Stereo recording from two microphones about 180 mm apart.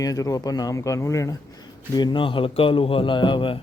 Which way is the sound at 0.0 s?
20° left (ahead or behind).